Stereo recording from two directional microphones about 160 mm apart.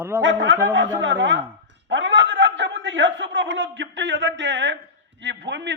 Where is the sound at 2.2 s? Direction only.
90° right.